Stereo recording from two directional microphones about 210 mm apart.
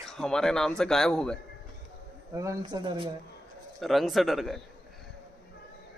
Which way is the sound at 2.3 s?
15° right (ahead or behind).